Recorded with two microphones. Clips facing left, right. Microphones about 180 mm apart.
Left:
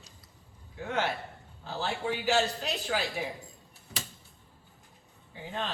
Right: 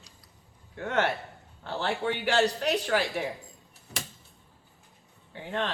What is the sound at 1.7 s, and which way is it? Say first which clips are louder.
Speech: right 3 dB; 80° right.